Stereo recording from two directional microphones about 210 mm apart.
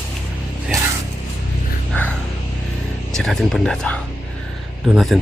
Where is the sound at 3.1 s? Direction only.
Centre (ahead or behind).